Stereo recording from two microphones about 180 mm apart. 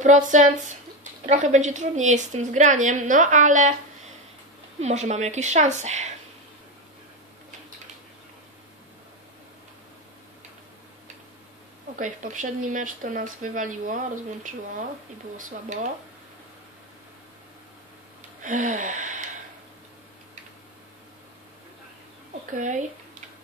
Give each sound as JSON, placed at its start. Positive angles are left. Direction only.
{"t": 0.0, "sound": "a woman's voice", "side_deg": -45}
{"t": 4.7, "sound": "a woman's voice", "side_deg": -40}
{"t": 12.0, "sound": "a woman's voice", "side_deg": -45}
{"t": 15.3, "sound": "a woman's voice", "side_deg": -45}
{"t": 18.4, "sound": "a sound", "side_deg": -45}
{"t": 22.5, "sound": "a woman's voice", "side_deg": -45}